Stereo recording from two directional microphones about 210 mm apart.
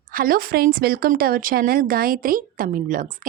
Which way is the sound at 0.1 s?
45° right (ahead or behind).